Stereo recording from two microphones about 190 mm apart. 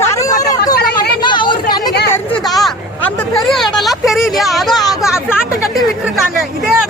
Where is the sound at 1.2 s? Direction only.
25° left (ahead or behind).